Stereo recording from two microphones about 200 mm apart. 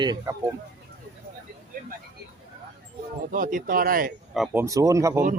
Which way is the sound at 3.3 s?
45° right (ahead or behind).